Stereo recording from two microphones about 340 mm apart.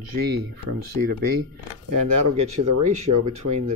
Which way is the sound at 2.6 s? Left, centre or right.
Right.